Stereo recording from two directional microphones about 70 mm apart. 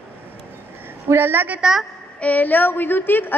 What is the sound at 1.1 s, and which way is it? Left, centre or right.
Speech, right.